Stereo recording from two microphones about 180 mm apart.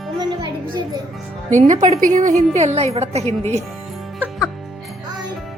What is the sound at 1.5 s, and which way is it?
A woman's voice, 45° right (ahead or behind).